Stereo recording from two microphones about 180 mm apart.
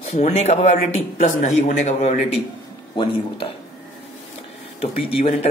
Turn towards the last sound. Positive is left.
turn(degrees=35)  # may be behind; listen again after turning